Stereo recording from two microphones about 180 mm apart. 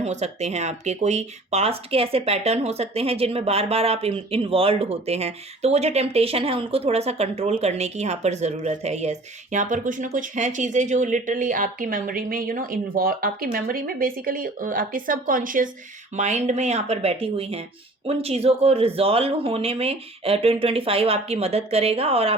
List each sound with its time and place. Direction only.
0.0 s speech: 40° right (ahead or behind)